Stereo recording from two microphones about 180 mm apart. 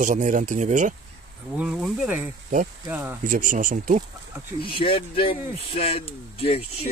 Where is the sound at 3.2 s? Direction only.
50° right (ahead or behind).